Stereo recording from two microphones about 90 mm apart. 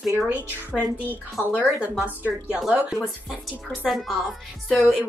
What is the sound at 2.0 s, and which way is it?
Speech, 20° left (ahead or behind).